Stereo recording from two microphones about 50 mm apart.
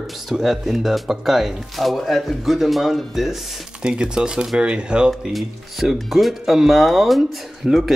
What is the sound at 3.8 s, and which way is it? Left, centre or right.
Speech, centre.